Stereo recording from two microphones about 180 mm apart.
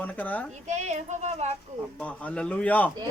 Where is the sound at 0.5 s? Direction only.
40° right (ahead or behind).